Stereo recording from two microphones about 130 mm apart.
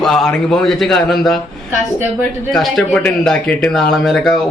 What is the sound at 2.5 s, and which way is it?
Speech, centre (ahead or behind).